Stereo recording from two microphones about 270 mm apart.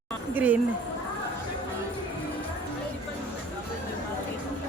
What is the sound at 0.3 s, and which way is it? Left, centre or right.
Speech, centre.